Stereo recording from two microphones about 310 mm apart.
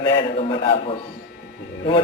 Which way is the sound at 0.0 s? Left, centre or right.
Centre.